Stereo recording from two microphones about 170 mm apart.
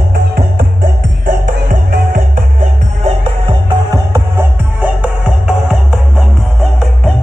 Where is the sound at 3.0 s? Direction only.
30° right (ahead or behind).